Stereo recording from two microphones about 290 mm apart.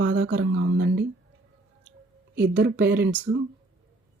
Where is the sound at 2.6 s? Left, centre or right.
Right.